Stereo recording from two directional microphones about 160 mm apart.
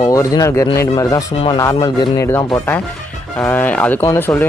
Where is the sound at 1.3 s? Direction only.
35° left (ahead or behind).